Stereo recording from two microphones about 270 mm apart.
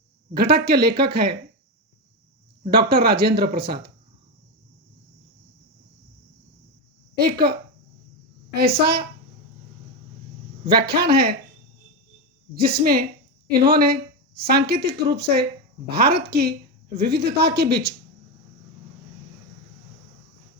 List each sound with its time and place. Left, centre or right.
0.3 s speech: right
2.6 s speech: right
7.2 s speech: right
8.5 s speech: right
10.7 s speech: right
12.5 s a woman's voice: right